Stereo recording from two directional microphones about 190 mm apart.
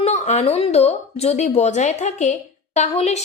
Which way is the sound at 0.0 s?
35° left (ahead or behind).